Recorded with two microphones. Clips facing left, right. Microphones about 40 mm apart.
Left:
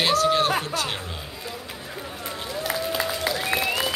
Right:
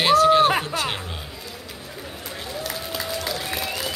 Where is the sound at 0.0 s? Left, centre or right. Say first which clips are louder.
Right 5 dB; centre.